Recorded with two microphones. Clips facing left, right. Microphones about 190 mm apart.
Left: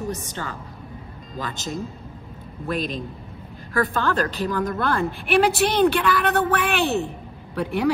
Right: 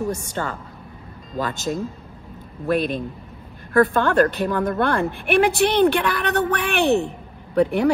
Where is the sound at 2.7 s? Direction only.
55° right (ahead or behind).